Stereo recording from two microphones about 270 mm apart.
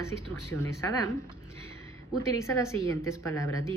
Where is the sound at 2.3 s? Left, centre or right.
Centre.